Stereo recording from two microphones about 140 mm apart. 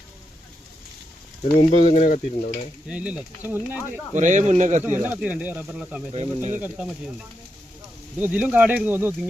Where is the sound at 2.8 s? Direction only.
10° right (ahead or behind).